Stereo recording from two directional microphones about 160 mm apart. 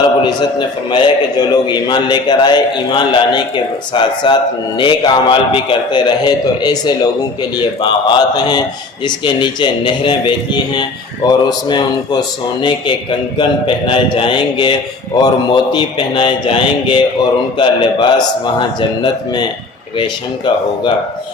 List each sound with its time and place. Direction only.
0.9 s a man's voice: 30° left (ahead or behind)